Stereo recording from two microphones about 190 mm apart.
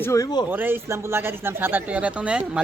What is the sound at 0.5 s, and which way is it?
A man's voice, 10° right (ahead or behind).